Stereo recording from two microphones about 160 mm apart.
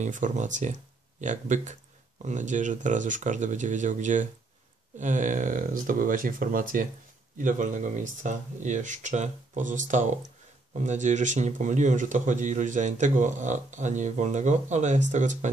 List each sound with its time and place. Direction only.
0.0 s speech: 50° right (ahead or behind)